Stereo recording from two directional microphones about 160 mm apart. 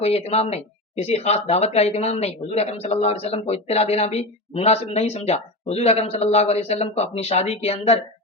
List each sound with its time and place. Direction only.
0.0 s speech: 40° left (ahead or behind)